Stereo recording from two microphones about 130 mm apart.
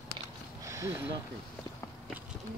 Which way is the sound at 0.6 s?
25° right (ahead or behind).